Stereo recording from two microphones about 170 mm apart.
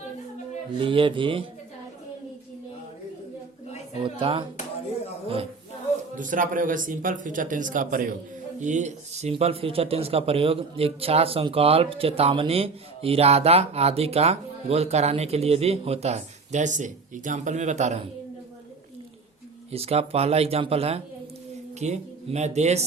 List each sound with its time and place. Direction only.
0.8 s speech: 30° right (ahead or behind)
4.0 s speech: 30° right (ahead or behind)
6.1 s speech: 50° right (ahead or behind)
19.7 s speech: 35° right (ahead or behind)